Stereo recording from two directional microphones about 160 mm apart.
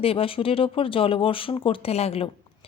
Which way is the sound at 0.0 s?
35° left (ahead or behind).